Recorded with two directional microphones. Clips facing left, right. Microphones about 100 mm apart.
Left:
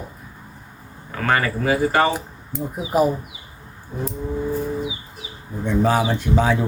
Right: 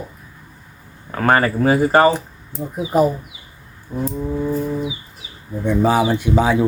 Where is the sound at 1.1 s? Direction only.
40° right (ahead or behind).